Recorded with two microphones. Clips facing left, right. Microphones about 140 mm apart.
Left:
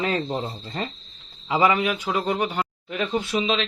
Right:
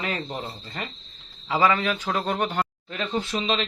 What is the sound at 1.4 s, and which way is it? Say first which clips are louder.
A man's voice: left 2 dB; 20° left (ahead or behind).